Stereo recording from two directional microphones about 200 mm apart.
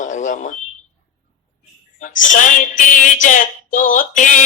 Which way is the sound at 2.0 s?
40° left (ahead or behind).